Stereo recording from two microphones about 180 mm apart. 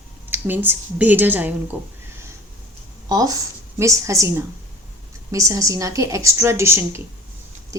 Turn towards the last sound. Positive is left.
turn(degrees=-15)  # may be behind; listen again after turning